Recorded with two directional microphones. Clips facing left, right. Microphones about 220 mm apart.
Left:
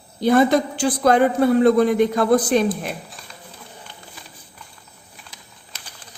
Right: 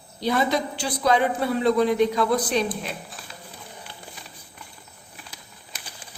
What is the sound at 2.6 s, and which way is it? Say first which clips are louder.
Speech: left 6 dB; centre (ahead or behind).